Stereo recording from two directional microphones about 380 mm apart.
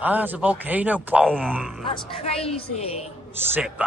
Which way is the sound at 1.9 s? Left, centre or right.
Centre.